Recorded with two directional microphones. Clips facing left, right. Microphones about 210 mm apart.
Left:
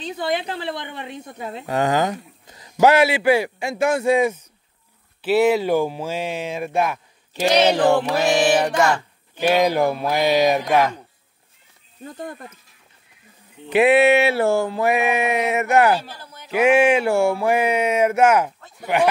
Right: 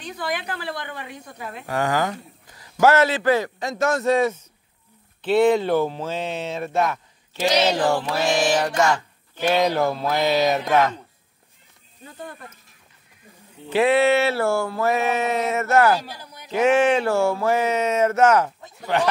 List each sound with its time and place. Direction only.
0.0 s speech: 25° left (ahead or behind)
13.7 s speech: 15° left (ahead or behind)
16.0 s a sound: 10° right (ahead or behind)
16.5 s speech: 10° left (ahead or behind)